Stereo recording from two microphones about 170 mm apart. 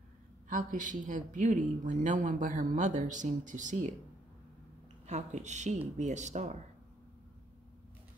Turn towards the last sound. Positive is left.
turn(degrees=-45)  # may be behind; listen again after turning